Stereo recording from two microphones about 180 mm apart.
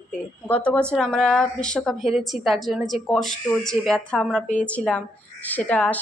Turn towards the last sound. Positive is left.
turn(degrees=10)  # may be behind; listen again after turning